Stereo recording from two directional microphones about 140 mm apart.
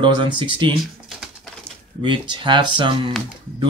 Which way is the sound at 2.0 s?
35° right (ahead or behind).